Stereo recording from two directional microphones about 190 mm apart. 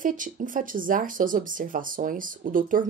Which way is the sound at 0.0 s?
45° right (ahead or behind).